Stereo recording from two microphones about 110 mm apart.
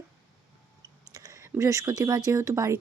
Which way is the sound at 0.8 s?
35° right (ahead or behind).